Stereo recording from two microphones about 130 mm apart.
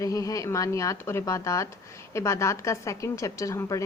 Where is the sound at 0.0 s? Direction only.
25° left (ahead or behind).